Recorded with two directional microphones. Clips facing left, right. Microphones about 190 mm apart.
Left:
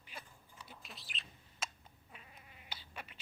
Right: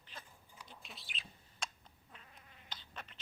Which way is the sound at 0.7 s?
Centre (ahead or behind).